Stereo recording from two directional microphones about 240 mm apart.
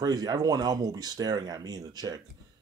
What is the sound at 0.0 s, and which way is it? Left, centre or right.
Speech, centre.